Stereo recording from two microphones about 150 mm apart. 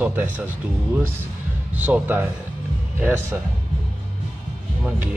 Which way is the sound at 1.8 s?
10° right (ahead or behind).